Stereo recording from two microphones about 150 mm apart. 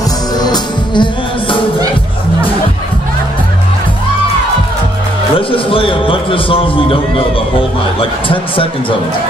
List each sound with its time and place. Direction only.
0.4 s music: 30° left (ahead or behind)
5.5 s a sound: 35° left (ahead or behind)
8.0 s speech: 35° left (ahead or behind)